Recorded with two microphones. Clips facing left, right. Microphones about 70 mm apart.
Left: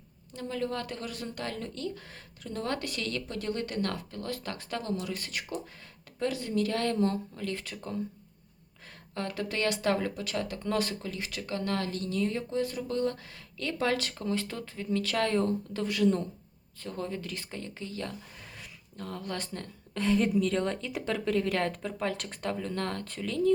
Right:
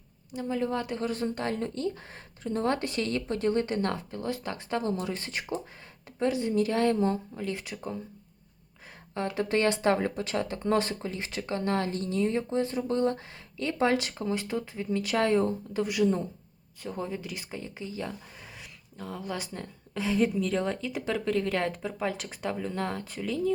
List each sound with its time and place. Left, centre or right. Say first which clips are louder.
0.3 s speech: right 4 dB; centre
9.1 s a woman's voice: right 5 dB; right; by 23.5 s centre